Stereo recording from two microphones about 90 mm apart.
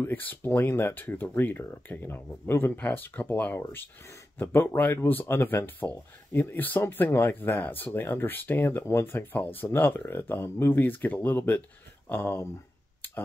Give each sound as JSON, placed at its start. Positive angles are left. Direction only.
{"t": 0.0, "sound": "speech", "side_deg": 20}